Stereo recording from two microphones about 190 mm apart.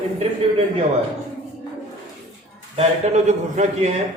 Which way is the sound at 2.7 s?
35° right (ahead or behind).